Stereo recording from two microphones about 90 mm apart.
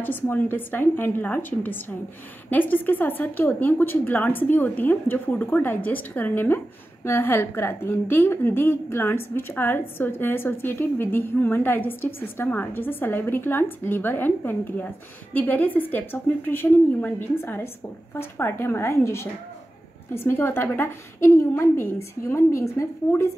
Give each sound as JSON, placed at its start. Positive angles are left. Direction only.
{"t": 0.0, "sound": "a woman's voice", "side_deg": 20}